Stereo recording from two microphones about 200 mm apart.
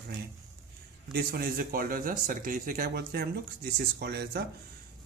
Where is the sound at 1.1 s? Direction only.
50° right (ahead or behind).